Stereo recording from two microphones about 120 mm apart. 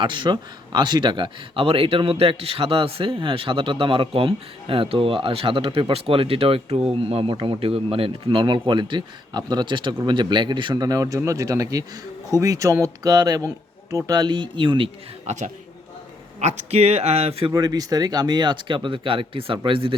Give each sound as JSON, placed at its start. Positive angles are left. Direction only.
{"t": 0.0, "sound": "speech", "side_deg": -45}
{"t": 15.3, "sound": "a man's voice", "side_deg": -70}
{"t": 17.5, "sound": "speech", "side_deg": -30}